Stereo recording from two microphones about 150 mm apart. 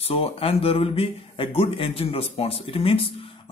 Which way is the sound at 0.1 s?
40° left (ahead or behind).